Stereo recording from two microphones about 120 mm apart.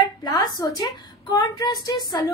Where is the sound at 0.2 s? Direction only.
35° left (ahead or behind).